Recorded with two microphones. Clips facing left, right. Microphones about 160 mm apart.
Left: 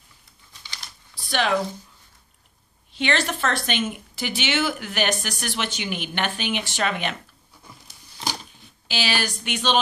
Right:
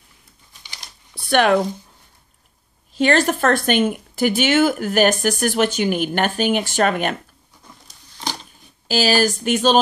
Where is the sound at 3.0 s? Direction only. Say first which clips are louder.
Right 7 dB; 45° right (ahead or behind).